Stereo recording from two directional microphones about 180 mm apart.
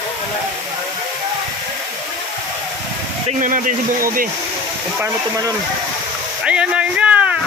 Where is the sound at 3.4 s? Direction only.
45° right (ahead or behind).